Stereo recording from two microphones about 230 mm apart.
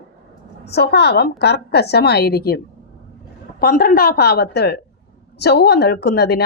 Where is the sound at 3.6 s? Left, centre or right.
Left.